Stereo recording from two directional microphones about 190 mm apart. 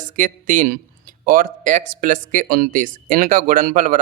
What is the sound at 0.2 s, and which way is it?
Speech, 45° right (ahead or behind).